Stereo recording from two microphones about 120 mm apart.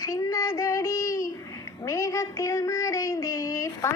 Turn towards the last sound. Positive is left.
turn(degrees=25)  # may be behind; listen again after turning